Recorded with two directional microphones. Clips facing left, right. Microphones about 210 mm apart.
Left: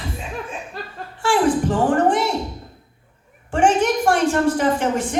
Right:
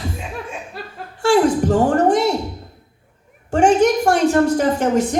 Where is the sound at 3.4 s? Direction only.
40° right (ahead or behind).